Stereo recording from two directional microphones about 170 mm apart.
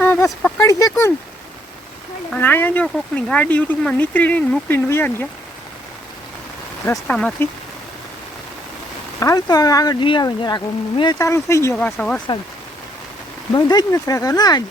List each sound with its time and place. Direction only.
0.0 s a sound: 10° left (ahead or behind)
0.3 s speech: 10° left (ahead or behind)
0.6 s speech: 20° left (ahead or behind)
2.3 s speech: 10° left (ahead or behind)
7.1 s speech: 5° left (ahead or behind)
9.2 s speech: 20° left (ahead or behind)
13.5 s speech: 25° left (ahead or behind)